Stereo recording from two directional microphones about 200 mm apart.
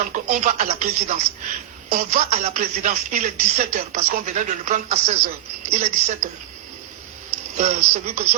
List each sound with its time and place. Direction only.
0.1 s speech: 40° right (ahead or behind)
7.5 s speech: 35° right (ahead or behind)